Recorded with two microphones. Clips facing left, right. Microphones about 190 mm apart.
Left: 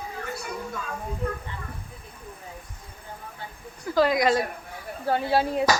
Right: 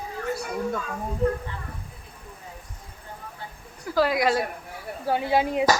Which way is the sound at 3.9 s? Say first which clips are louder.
Left 1 dB; 5° right (ahead or behind).